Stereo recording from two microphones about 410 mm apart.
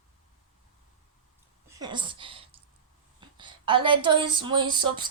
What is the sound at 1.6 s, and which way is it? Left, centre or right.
A woman's voice, centre.